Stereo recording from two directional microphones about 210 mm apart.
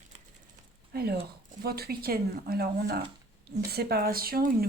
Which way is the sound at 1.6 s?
45° right (ahead or behind).